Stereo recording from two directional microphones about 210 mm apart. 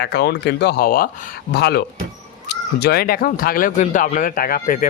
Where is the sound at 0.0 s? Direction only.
50° left (ahead or behind).